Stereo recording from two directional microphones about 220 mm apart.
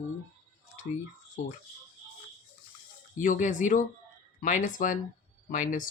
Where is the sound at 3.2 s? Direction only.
35° left (ahead or behind).